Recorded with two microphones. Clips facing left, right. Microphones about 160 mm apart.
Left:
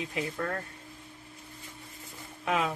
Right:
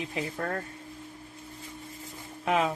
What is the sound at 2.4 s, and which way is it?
Speech, 25° right (ahead or behind).